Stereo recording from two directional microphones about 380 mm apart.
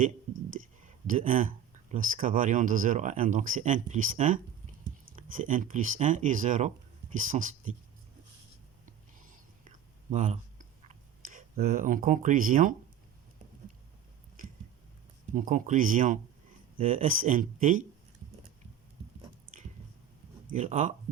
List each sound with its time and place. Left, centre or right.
0.6 s a sound: centre
1.0 s speech: right
9.6 s whispering: centre
10.8 s a sound: right
15.4 s speech: right
20.5 s speech: centre